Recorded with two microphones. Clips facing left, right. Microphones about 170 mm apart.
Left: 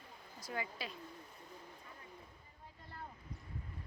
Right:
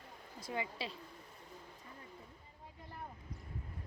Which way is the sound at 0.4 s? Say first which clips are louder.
Right 2 dB; 25° right (ahead or behind).